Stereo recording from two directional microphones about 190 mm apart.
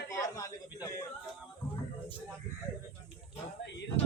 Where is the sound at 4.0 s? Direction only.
30° left (ahead or behind).